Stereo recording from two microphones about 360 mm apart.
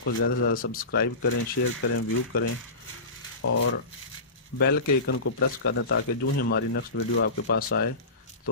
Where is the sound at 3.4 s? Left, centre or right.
Left.